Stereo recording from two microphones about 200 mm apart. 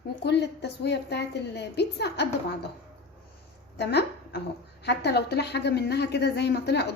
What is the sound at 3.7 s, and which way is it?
A woman's voice, 55° left (ahead or behind).